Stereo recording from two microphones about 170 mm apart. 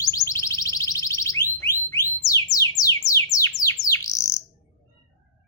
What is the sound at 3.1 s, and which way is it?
Bird, 20° left (ahead or behind).